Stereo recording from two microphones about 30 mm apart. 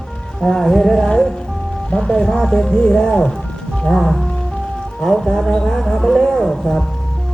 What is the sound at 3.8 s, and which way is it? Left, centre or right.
Speech, centre.